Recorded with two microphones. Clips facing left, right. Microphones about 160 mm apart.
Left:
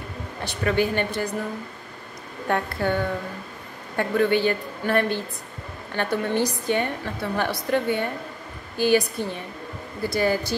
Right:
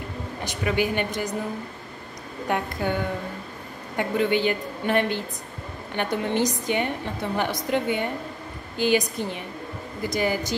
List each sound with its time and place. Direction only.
0.4 s a woman's voice: 15° right (ahead or behind)
2.4 s a woman's voice: 15° right (ahead or behind)